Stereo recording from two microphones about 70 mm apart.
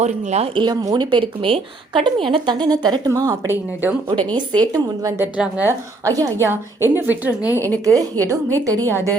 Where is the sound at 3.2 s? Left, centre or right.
Right.